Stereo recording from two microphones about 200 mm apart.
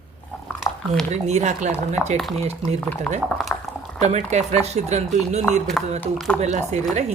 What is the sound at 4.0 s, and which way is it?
Speech, 35° right (ahead or behind).